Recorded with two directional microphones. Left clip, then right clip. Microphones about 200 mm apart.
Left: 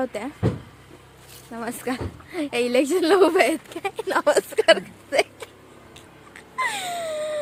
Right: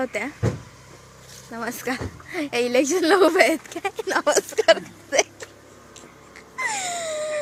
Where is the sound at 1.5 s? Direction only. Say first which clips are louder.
Right 1 dB; centre (ahead or behind).